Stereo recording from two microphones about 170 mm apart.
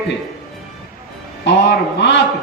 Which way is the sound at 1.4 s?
90° left.